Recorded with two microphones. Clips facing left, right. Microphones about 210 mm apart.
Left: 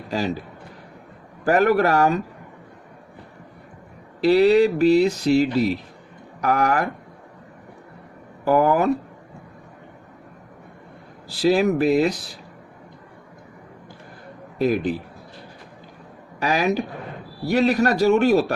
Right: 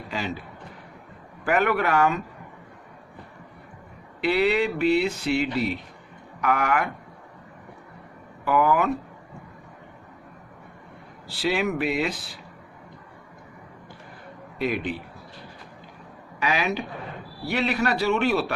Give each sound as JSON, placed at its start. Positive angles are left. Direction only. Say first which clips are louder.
{"t": 0.1, "sound": "speech", "louder": "left 6 dB", "side_deg": 40}
{"t": 1.5, "sound": "speech", "louder": "left 5 dB", "side_deg": 40}
{"t": 4.2, "sound": "speech", "louder": "left 7 dB", "side_deg": 40}
{"t": 8.4, "sound": "speech", "louder": "left 4 dB", "side_deg": 40}
{"t": 11.3, "sound": "speech", "louder": "left 7 dB", "side_deg": 35}
{"t": 14.6, "sound": "speech", "louder": "left 6 dB", "side_deg": 40}
{"t": 16.4, "sound": "a man's voice", "louder": "left 5 dB", "side_deg": 40}